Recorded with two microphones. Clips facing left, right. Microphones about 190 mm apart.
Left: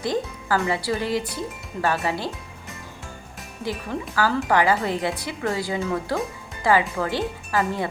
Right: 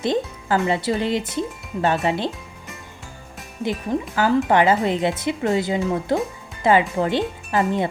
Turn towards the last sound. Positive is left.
turn(degrees=-20)  # may be behind; listen again after turning